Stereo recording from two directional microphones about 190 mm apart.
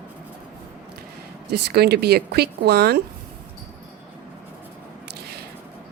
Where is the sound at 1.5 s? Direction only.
60° right (ahead or behind).